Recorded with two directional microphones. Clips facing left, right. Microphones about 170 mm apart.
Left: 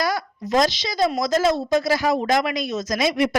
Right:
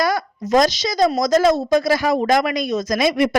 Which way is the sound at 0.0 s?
50° right (ahead or behind).